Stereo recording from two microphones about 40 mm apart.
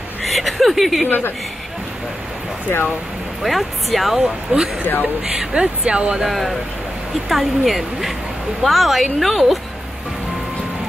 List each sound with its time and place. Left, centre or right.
0.2 s chuckle: centre
1.0 s speech: left
3.4 s speech: centre
4.5 s speech: right
6.2 s speech: centre